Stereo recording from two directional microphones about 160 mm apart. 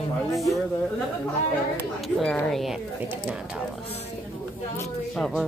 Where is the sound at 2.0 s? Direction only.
Centre (ahead or behind).